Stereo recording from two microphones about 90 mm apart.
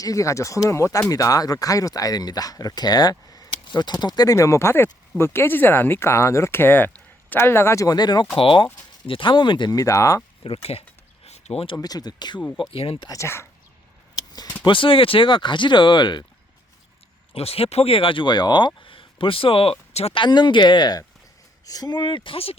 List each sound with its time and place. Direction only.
0.0 s speech: 35° left (ahead or behind)
7.9 s speech: 50° left (ahead or behind)
8.4 s speech: 70° left (ahead or behind)
9.7 s speech: 40° left (ahead or behind)
10.4 s speech: 90° left
11.8 s speech: 45° left (ahead or behind)
12.7 s speech: 90° left
13.1 s speech: 30° left (ahead or behind)
14.6 s speech: 70° left (ahead or behind)
17.3 s speech: 90° left
20.1 s speech: 65° left (ahead or behind); by 22.5 s 85° left